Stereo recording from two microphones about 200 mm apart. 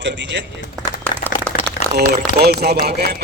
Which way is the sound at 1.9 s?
55° right (ahead or behind).